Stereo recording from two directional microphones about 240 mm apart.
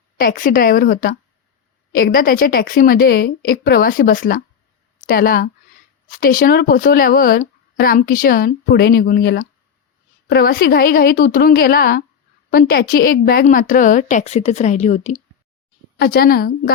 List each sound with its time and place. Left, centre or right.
0.2 s speech: left
16.0 s speech: left